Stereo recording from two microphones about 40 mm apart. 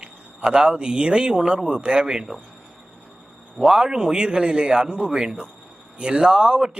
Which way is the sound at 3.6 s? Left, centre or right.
Centre.